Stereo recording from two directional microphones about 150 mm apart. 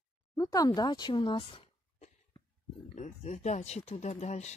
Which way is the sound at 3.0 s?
50° left (ahead or behind).